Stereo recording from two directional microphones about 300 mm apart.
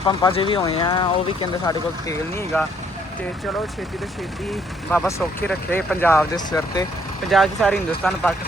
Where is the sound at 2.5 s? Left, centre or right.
Centre.